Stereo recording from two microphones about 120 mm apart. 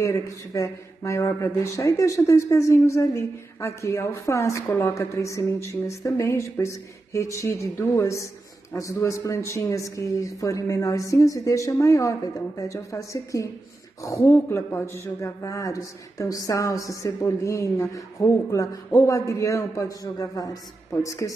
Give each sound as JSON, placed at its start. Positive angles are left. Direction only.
{"t": 0.0, "sound": "speech", "side_deg": 25}